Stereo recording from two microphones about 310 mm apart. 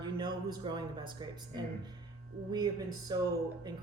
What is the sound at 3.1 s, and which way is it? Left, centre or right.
Speech, centre.